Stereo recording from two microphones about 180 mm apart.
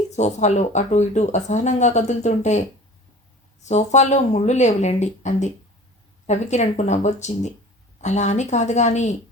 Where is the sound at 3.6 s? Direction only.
40° left (ahead or behind).